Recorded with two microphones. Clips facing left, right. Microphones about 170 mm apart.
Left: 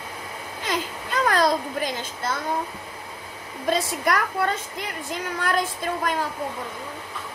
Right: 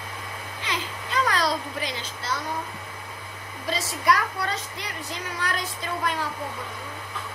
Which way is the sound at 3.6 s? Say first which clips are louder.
Left 2 dB; 50° left (ahead or behind).